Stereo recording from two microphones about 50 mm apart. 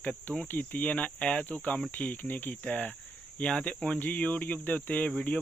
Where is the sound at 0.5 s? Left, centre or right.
Left.